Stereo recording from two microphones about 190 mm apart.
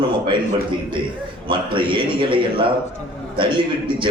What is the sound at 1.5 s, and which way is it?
A man's voice, 25° right (ahead or behind).